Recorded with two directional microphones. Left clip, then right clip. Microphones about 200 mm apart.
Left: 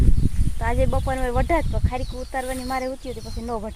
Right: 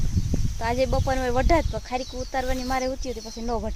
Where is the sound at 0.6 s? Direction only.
10° right (ahead or behind).